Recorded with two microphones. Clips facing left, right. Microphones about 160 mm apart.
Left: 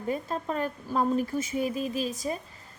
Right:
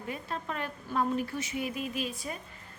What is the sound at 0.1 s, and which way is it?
Speech, 40° left (ahead or behind).